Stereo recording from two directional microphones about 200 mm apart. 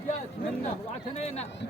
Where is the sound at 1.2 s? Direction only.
30° left (ahead or behind).